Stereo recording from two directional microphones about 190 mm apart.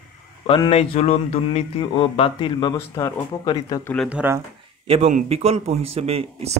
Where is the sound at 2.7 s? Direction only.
15° left (ahead or behind).